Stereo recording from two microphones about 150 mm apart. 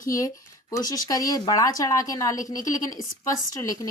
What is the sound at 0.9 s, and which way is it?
Speech, 25° left (ahead or behind).